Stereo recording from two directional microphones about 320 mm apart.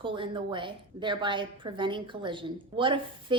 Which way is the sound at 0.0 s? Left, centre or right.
Centre.